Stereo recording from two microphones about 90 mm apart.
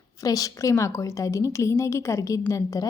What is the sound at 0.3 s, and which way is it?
A woman's voice, 40° left (ahead or behind).